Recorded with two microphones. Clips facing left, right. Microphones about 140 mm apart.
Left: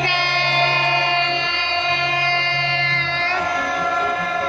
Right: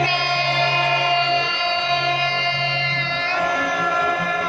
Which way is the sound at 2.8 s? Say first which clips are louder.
Left 1 dB; 60° left (ahead or behind).